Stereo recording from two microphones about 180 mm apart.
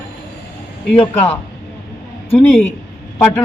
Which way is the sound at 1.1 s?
10° left (ahead or behind).